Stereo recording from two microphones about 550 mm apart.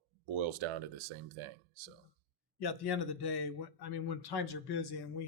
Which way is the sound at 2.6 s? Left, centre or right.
Left.